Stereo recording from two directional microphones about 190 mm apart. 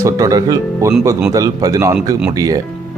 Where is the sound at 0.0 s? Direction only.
20° right (ahead or behind).